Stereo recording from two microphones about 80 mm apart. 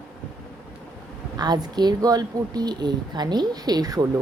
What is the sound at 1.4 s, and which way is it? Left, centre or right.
A woman's voice, right.